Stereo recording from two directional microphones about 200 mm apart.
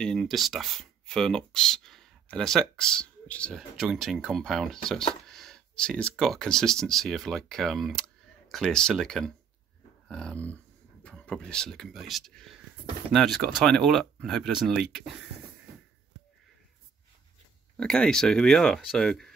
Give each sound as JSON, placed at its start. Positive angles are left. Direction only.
{"t": 0.0, "sound": "speech", "side_deg": 0}
{"t": 17.7, "sound": "speech", "side_deg": 5}